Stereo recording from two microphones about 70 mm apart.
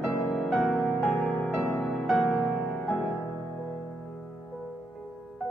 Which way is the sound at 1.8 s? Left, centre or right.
Centre.